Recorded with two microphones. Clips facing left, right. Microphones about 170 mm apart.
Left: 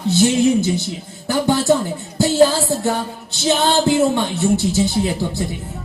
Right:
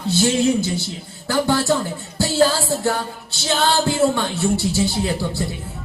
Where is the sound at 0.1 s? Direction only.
20° left (ahead or behind).